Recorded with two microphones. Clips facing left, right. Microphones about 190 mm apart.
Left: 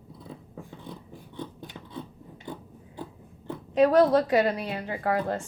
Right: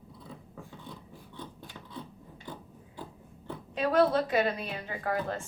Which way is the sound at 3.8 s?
40° left (ahead or behind).